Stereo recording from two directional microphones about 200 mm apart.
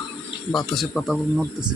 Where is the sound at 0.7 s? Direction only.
Centre (ahead or behind).